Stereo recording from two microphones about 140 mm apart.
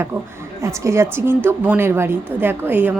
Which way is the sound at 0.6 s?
20° right (ahead or behind).